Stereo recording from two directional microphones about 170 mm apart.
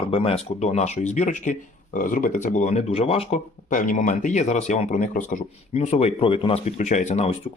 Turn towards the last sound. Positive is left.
turn(degrees=40)  # may be behind; listen again after turning